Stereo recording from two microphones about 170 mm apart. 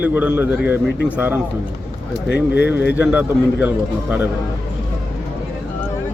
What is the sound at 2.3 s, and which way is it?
Speech, 80° left.